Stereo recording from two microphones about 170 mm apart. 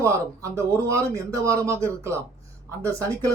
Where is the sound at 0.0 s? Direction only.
15° right (ahead or behind).